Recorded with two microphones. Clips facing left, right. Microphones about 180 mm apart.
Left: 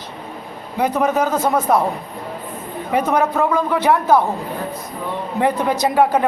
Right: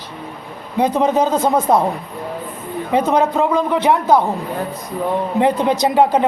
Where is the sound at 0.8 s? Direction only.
20° right (ahead or behind).